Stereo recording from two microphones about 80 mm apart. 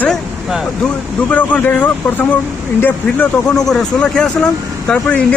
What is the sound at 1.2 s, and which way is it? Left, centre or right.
Speech, centre.